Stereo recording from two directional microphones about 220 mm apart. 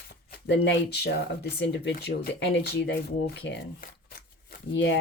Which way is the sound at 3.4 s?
45° left (ahead or behind).